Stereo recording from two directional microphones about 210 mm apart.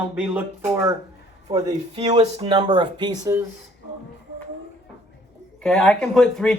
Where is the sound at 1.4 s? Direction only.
20° right (ahead or behind).